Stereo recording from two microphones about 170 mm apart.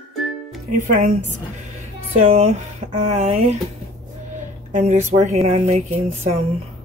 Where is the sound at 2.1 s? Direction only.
40° right (ahead or behind).